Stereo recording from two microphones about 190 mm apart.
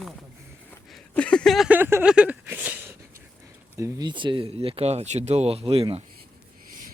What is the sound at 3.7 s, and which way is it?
Speech, 20° right (ahead or behind).